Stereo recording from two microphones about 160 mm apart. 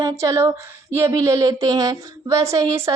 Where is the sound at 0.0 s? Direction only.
20° right (ahead or behind).